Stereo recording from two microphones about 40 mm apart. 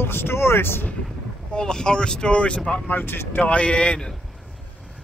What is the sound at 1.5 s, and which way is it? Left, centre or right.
Speech, centre.